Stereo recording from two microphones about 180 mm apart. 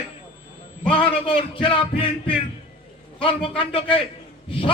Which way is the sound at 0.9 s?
30° left (ahead or behind).